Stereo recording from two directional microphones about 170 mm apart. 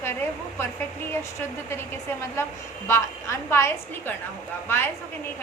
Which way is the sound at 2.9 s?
15° left (ahead or behind).